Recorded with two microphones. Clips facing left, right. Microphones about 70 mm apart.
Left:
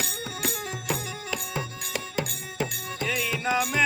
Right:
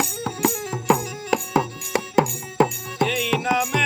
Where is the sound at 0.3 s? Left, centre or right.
Right.